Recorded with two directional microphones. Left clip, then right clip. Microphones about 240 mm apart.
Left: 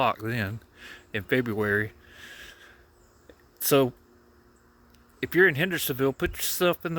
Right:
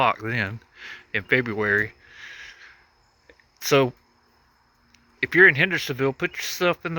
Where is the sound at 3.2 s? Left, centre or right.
Centre.